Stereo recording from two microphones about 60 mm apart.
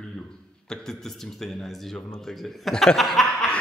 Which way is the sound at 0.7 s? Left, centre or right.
Centre.